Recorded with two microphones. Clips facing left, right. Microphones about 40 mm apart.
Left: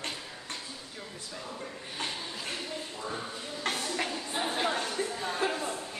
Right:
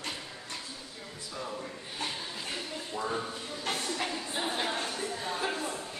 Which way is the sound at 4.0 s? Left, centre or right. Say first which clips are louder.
Left 1 dB; centre.